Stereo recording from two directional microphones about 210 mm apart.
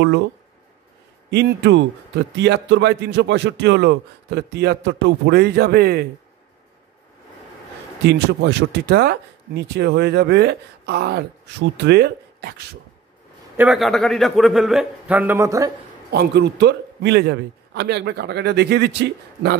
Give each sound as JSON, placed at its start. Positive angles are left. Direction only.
{"t": 1.3, "sound": "a man's voice", "side_deg": -55}
{"t": 8.0, "sound": "speech", "side_deg": -55}
{"t": 13.6, "sound": "a man's voice", "side_deg": 0}
{"t": 16.1, "sound": "speech", "side_deg": -50}